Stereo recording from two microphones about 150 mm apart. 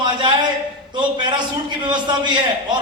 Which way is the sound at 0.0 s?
30° right (ahead or behind).